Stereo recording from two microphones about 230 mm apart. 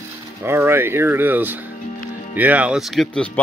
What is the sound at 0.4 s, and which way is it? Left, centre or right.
Speech, centre.